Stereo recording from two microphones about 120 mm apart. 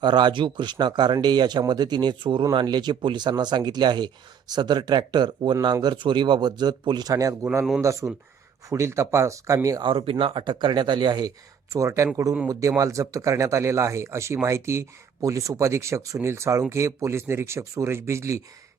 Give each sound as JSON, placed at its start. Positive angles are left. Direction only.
{"t": 0.0, "sound": "speech", "side_deg": -40}
{"t": 9.8, "sound": "speech", "side_deg": -50}
{"t": 11.7, "sound": "speech", "side_deg": -25}